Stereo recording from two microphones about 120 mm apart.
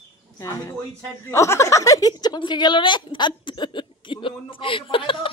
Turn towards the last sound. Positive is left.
turn(degrees=45)  # may be behind; listen again after turning